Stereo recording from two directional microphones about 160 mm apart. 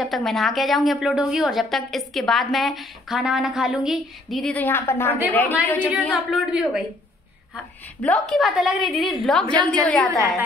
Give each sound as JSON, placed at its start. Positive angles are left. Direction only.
{"t": 0.0, "sound": "a woman's voice", "side_deg": 0}
{"t": 4.6, "sound": "a woman's voice", "side_deg": 15}
{"t": 5.9, "sound": "a woman's voice", "side_deg": -5}
{"t": 7.5, "sound": "a woman's voice", "side_deg": 5}